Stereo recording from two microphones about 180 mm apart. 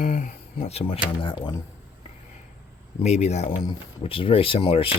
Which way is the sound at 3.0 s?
40° left (ahead or behind).